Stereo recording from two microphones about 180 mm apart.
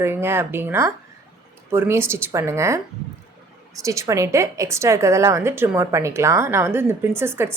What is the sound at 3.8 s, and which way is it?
A woman's voice, 15° right (ahead or behind).